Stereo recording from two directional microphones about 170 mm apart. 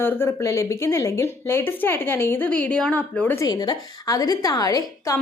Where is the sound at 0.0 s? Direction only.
10° left (ahead or behind).